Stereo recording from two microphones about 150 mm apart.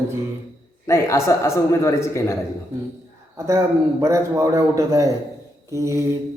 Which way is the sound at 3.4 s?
20° right (ahead or behind).